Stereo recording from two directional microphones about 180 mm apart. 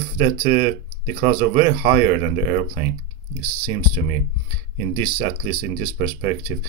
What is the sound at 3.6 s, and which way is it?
Speech, 15° right (ahead or behind).